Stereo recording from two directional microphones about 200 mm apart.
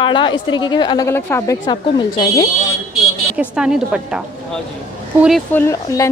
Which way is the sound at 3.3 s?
5° right (ahead or behind).